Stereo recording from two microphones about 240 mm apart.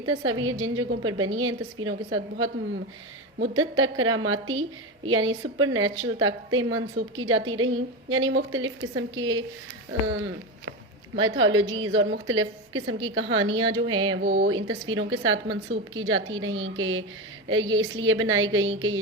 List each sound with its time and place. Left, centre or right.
0.0 s a woman's voice: right
10.7 s a woman's voice: right